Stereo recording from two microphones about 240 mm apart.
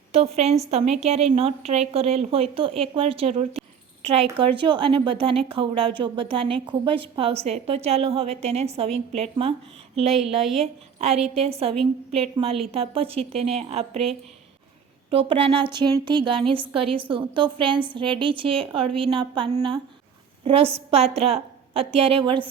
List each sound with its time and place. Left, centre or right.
0.1 s a woman's voice: right
10.4 s a woman's voice: centre
10.9 s a woman's voice: right
15.1 s a woman's voice: right